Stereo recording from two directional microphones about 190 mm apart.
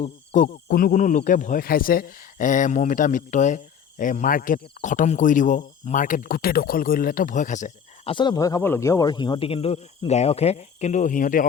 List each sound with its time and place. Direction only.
0.0 s hoot: 35° left (ahead or behind)
0.7 s speech: 50° left (ahead or behind)
8.1 s speech: 25° left (ahead or behind); by 11.4 s 45° left (ahead or behind)